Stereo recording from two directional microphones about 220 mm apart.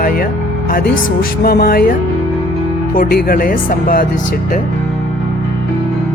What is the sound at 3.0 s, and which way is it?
Speech, 45° left (ahead or behind).